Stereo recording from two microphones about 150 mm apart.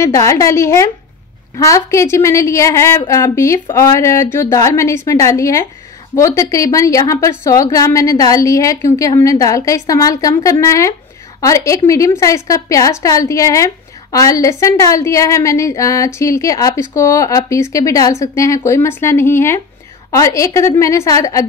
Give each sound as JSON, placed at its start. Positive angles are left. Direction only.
{"t": 0.0, "sound": "a woman's voice", "side_deg": 20}